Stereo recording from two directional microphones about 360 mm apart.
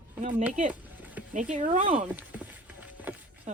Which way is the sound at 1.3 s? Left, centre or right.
Centre.